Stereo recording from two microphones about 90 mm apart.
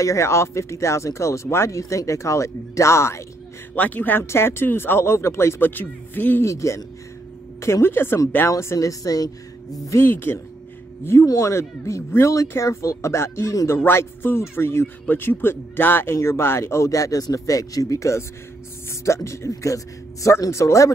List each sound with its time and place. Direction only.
0.0 s speech: 35° left (ahead or behind)
3.7 s a man's voice: 20° left (ahead or behind)
6.4 s a man's voice: 35° left (ahead or behind)
9.8 s a man's voice: 25° left (ahead or behind)
11.2 s a man's voice: 35° left (ahead or behind)